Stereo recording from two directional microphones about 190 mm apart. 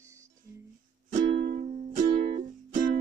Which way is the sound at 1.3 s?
40° right (ahead or behind).